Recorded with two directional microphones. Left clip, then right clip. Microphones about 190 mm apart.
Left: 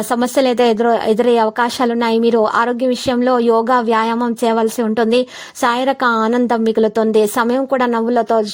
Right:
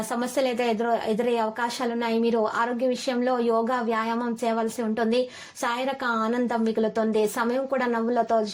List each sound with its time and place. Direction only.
0.1 s speech: 45° left (ahead or behind)